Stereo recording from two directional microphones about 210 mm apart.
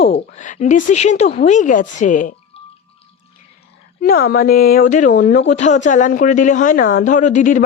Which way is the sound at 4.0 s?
45° left (ahead or behind).